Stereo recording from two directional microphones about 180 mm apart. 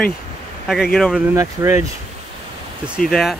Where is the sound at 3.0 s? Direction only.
Centre (ahead or behind).